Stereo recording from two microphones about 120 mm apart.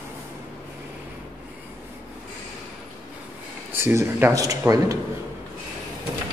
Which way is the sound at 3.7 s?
20° right (ahead or behind).